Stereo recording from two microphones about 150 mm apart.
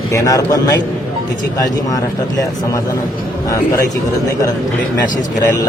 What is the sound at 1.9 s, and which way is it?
Speech, 25° left (ahead or behind).